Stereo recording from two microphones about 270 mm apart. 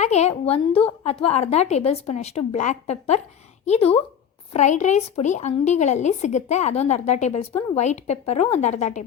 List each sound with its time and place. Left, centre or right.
0.0 s a woman's voice: left